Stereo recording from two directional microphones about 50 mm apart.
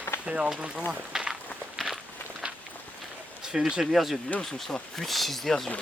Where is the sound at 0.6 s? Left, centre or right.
Centre.